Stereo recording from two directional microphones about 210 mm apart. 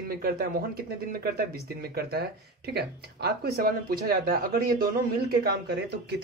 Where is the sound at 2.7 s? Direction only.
50° right (ahead or behind).